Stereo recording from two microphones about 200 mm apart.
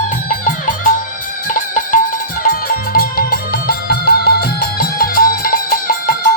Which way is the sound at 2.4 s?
45° left (ahead or behind).